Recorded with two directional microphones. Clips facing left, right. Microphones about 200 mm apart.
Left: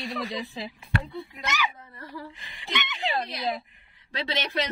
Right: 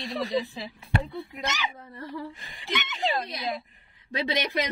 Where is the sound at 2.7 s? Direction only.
40° right (ahead or behind).